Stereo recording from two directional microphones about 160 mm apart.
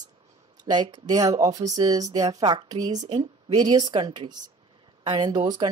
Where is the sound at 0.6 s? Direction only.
25° right (ahead or behind).